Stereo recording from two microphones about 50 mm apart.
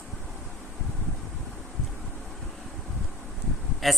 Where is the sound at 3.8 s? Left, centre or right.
Centre.